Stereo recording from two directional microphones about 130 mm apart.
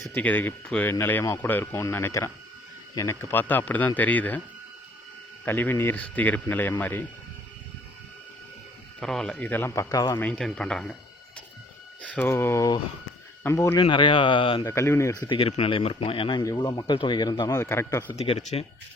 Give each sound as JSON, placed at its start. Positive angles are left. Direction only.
{"t": 0.1, "sound": "speech", "side_deg": 15}
{"t": 5.5, "sound": "speech", "side_deg": 15}
{"t": 9.0, "sound": "speech", "side_deg": 5}
{"t": 10.2, "sound": "speech", "side_deg": 10}
{"t": 12.1, "sound": "speech", "side_deg": 15}
{"t": 13.7, "sound": "speech", "side_deg": 40}
{"t": 14.6, "sound": "speech", "side_deg": 20}
{"t": 15.3, "sound": "speech", "side_deg": 50}
{"t": 16.4, "sound": "speech", "side_deg": 30}
{"t": 18.2, "sound": "speech", "side_deg": 55}